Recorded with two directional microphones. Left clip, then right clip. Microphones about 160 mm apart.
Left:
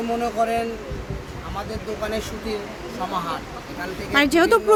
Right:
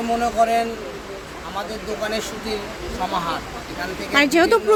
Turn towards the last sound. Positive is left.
turn(degrees=10)  # may be behind; listen again after turning